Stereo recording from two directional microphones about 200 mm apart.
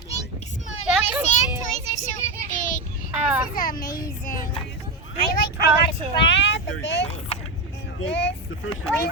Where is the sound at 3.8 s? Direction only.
45° left (ahead or behind).